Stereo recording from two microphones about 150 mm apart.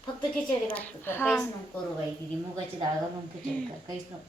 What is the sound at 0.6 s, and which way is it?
Speech, 10° left (ahead or behind).